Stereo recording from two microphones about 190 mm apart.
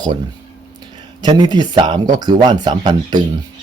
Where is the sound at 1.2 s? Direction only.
25° right (ahead or behind).